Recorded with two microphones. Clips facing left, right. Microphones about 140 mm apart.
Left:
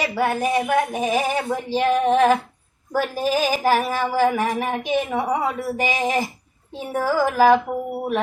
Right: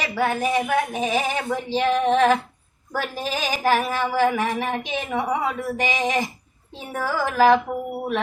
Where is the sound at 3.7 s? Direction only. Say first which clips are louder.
Right 1 dB; 40° left (ahead or behind).